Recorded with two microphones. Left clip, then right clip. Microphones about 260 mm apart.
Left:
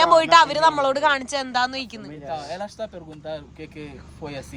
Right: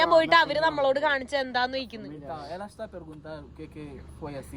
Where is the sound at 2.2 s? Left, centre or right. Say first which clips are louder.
Left 8 dB; left.